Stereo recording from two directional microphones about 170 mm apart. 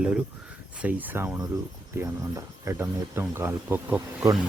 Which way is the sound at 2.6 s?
15° right (ahead or behind).